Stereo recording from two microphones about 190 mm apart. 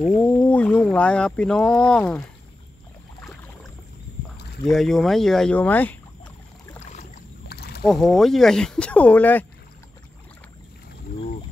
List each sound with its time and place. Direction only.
0.2 s speech: 10° left (ahead or behind)
4.6 s speech: centre (ahead or behind)
6.9 s boat: 40° left (ahead or behind)
7.4 s rowboat: 55° left (ahead or behind)
7.8 s speech: centre (ahead or behind)